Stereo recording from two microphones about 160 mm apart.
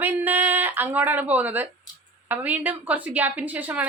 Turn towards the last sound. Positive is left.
turn(degrees=-10)  # may be behind; listen again after turning